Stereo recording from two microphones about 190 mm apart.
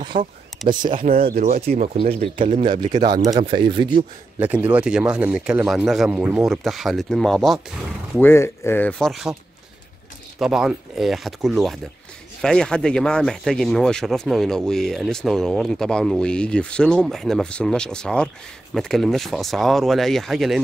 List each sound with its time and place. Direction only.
0.0 s a sound: 25° right (ahead or behind)
0.7 s speech: 25° right (ahead or behind)
1.3 s speech: 45° right (ahead or behind)
2.0 s speech: 30° right (ahead or behind)
4.4 s speech: 10° right (ahead or behind)
8.2 s speech: 10° left (ahead or behind)
10.4 s speech: 5° right (ahead or behind)